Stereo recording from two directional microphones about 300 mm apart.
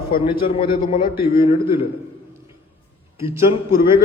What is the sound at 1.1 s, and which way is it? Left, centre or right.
Speech, centre.